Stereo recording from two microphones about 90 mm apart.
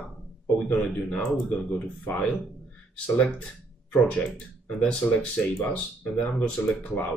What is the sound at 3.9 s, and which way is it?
Speech, 15° left (ahead or behind).